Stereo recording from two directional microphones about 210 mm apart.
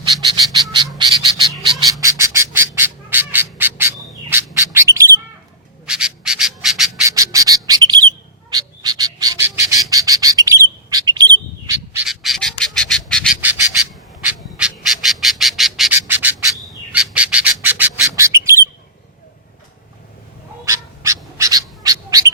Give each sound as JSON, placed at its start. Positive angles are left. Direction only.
{"t": 0.3, "sound": "frog", "side_deg": -20}
{"t": 1.8, "sound": "bird", "side_deg": -15}
{"t": 5.8, "sound": "bird", "side_deg": -5}
{"t": 7.0, "sound": "bird", "side_deg": -15}
{"t": 12.0, "sound": "bird", "side_deg": 0}
{"t": 13.3, "sound": "bird", "side_deg": -10}
{"t": 20.7, "sound": "bird", "side_deg": -15}